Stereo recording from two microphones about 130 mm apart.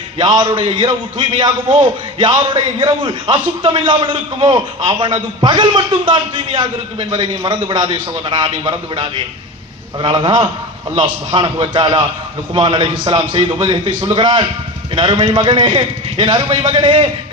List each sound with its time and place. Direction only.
0.2 s a man's voice: 35° right (ahead or behind)